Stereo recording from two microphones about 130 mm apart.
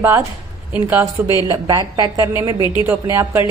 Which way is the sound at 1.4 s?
30° right (ahead or behind).